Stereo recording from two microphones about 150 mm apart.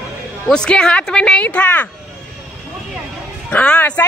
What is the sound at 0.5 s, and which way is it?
Speech, 5° left (ahead or behind).